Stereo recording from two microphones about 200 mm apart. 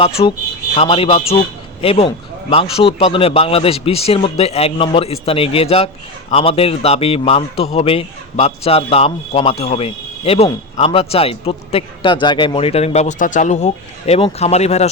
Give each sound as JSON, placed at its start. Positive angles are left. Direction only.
{"t": 0.0, "sound": "a man's voice", "side_deg": 30}